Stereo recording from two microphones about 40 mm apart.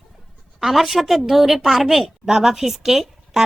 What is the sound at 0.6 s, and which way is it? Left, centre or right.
A woman's voice, centre.